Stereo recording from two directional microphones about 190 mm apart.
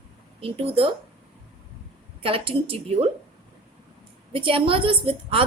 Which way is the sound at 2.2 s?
30° right (ahead or behind).